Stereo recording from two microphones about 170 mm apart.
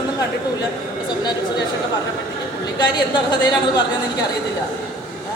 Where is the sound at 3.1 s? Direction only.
25° left (ahead or behind).